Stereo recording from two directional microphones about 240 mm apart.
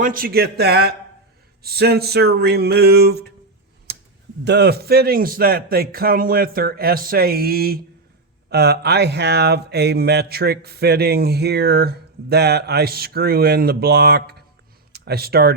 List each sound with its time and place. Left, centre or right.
0.0 s speech: right
4.4 s speech: right